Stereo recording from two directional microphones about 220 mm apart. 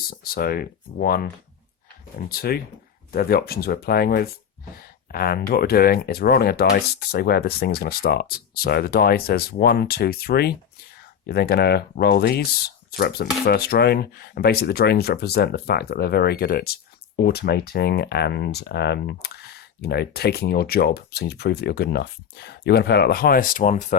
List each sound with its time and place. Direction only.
0.1 s speech: 40° left (ahead or behind)